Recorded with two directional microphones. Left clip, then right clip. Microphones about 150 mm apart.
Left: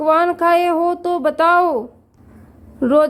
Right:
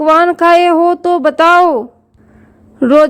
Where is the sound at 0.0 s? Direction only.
45° right (ahead or behind).